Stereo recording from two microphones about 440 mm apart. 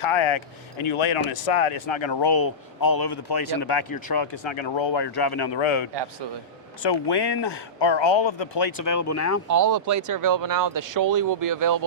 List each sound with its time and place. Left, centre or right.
0.0 s speech: left
2.3 s speech: left
5.9 s a man's voice: right
6.8 s speech: left
8.8 s speech: left
9.5 s speech: right